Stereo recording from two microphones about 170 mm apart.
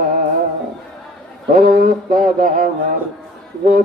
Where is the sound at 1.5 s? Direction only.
55° right (ahead or behind).